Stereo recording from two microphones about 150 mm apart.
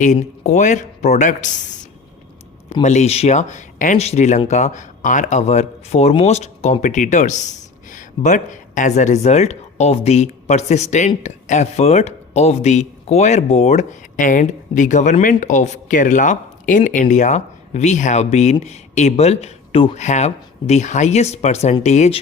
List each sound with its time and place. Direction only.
0.0 s speech: 55° left (ahead or behind)
2.8 s speech: 50° left (ahead or behind)